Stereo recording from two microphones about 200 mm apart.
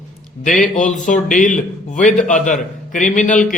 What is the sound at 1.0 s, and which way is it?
A man's voice, 40° left (ahead or behind).